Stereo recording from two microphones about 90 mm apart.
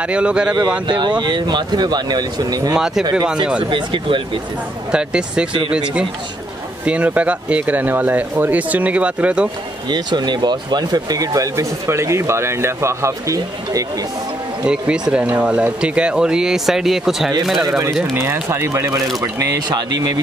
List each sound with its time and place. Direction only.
0.0 s speech: 10° right (ahead or behind)
0.7 s speech: 55° right (ahead or behind)
2.7 s speech: 5° right (ahead or behind)
3.7 s speech: 65° right (ahead or behind)
4.9 s speech: 10° right (ahead or behind)
9.8 s speech: 55° right (ahead or behind); by 13.8 s 35° right (ahead or behind)
14.6 s speech: 10° right (ahead or behind)
18.1 s speech: 25° right (ahead or behind); by 20.1 s 40° right (ahead or behind)